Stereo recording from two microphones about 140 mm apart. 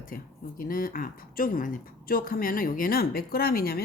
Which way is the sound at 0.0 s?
85° left.